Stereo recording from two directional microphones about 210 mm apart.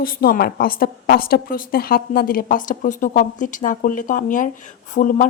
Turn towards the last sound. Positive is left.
turn(degrees=35)  # may be behind; listen again after turning